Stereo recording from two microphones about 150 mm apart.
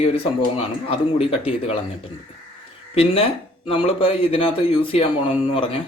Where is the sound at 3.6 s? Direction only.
40° left (ahead or behind).